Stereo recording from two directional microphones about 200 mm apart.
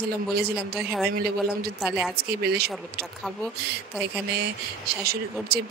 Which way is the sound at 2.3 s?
55° right (ahead or behind).